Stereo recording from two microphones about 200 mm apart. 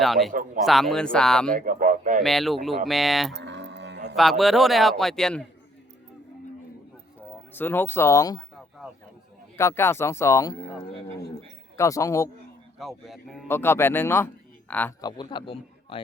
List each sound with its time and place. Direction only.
0.0 s a man's voice: centre (ahead or behind)
1.5 s a sound: 40° right (ahead or behind)
2.2 s a man's voice: centre (ahead or behind)
3.3 s dog: 60° right (ahead or behind)
4.1 s a man's voice: centre (ahead or behind)
7.2 s speech: 10° left (ahead or behind)
9.6 s speech: 15° left (ahead or behind)
11.8 s speech: 15° left (ahead or behind)
13.1 s a man's voice: centre (ahead or behind)
13.5 s speech: 10° left (ahead or behind)
15.0 s a man's voice: 25° left (ahead or behind)